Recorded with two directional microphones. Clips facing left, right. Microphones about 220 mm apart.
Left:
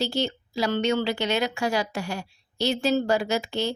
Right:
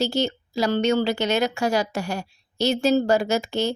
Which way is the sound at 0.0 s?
45° right (ahead or behind).